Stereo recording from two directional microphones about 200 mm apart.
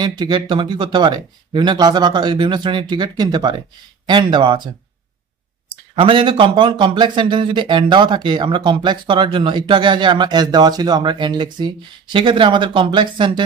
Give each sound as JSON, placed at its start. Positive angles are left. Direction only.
{"t": 0.0, "sound": "speech", "side_deg": -20}
{"t": 5.9, "sound": "speech", "side_deg": -25}